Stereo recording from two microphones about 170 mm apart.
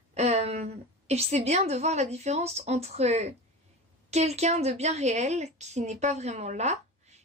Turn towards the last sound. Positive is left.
turn(degrees=-40)  # may be behind; listen again after turning